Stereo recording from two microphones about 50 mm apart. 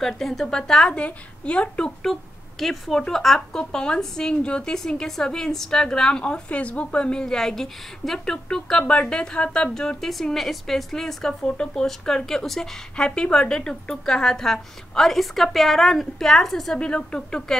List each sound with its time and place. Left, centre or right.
0.0 s a woman's voice: centre
0.9 s speech: left
2.1 s a woman's voice: centre; by 4.7 s left
4.7 s a woman's voice: centre
8.5 s a woman's voice: centre
16.7 s a woman's voice: centre